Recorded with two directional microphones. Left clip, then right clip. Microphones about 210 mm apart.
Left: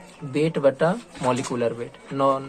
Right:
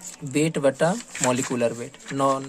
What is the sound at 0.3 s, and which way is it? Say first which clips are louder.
Speech: left 1 dB; 40° right (ahead or behind).